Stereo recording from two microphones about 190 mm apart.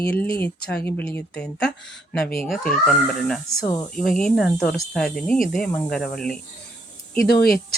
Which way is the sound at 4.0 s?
5° left (ahead or behind).